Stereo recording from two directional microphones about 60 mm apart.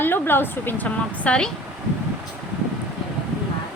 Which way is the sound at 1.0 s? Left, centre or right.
Centre.